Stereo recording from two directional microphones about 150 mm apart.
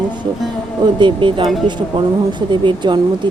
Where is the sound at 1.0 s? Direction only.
35° right (ahead or behind).